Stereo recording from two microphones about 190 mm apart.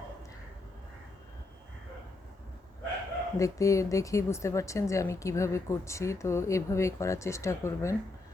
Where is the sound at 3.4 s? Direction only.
15° left (ahead or behind).